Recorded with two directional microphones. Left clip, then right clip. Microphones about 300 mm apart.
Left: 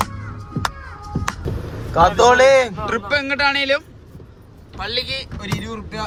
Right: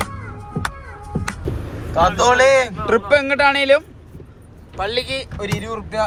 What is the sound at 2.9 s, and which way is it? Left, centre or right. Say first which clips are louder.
A man's voice: right 5 dB; centre.